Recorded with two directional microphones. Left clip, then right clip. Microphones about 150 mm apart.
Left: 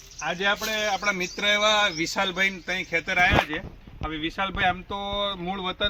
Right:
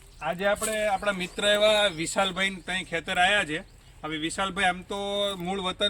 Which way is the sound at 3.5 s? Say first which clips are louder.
Left 1 dB; 30° right (ahead or behind).